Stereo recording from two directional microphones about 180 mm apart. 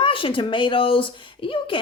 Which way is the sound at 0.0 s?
30° left (ahead or behind).